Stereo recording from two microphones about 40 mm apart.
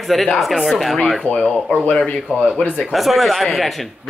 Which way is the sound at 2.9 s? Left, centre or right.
Centre.